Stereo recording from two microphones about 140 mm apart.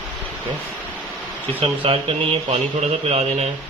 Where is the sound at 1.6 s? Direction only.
45° right (ahead or behind).